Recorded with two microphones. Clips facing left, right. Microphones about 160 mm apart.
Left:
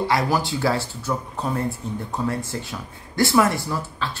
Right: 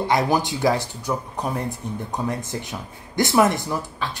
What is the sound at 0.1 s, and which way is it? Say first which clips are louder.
Speech: right 1 dB; 20° right (ahead or behind).